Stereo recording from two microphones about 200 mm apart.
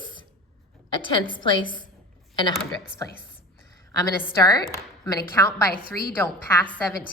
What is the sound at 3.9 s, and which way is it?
A woman's voice, 15° left (ahead or behind).